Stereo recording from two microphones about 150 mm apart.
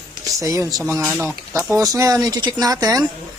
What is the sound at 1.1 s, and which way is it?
Speech, 5° right (ahead or behind).